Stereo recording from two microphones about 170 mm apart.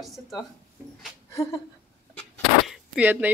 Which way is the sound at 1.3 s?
15° left (ahead or behind).